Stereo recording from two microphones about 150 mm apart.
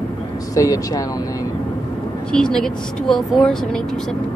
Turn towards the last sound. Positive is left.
turn(degrees=5)  # may be behind; listen again after turning